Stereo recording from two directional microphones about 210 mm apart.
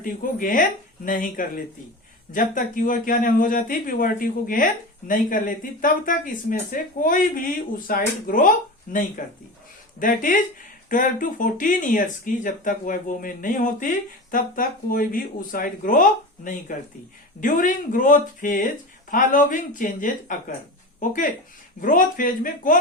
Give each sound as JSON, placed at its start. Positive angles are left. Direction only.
{"t": 0.0, "sound": "speech", "side_deg": 40}